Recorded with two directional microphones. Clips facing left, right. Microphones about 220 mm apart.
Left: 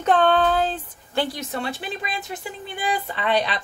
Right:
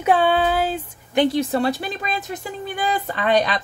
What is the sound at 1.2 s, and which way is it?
Speech, 30° right (ahead or behind).